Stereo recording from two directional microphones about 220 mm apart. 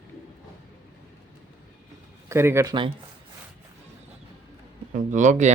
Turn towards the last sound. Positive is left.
turn(degrees=-35)  # may be behind; listen again after turning